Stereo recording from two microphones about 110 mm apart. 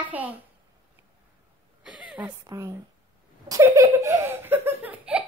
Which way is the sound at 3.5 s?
30° right (ahead or behind).